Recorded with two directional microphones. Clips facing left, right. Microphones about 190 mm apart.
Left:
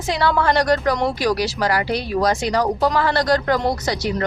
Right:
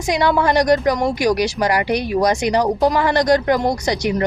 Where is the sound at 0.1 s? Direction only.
15° right (ahead or behind).